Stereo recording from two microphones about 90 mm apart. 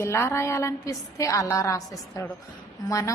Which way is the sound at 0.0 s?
30° left (ahead or behind).